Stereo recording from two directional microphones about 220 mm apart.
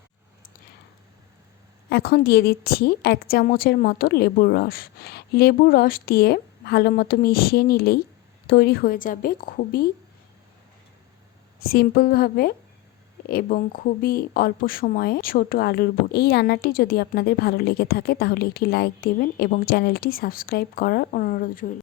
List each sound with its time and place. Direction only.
1.9 s a woman's voice: 45° left (ahead or behind)
11.6 s a woman's voice: 45° left (ahead or behind)